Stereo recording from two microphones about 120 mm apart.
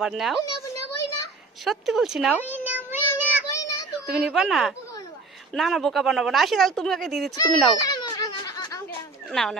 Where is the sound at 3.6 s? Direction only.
30° left (ahead or behind).